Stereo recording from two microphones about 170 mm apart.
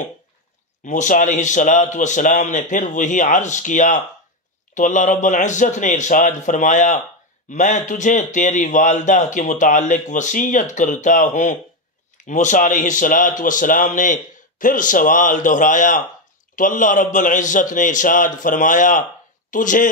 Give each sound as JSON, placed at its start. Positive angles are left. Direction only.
{"t": 0.8, "sound": "a man's voice", "side_deg": 45}